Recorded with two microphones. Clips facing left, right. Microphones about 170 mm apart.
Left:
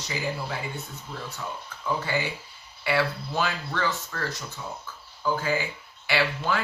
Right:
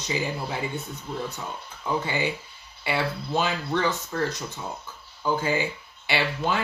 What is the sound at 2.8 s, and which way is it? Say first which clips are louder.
Speech: left 1 dB; 20° right (ahead or behind).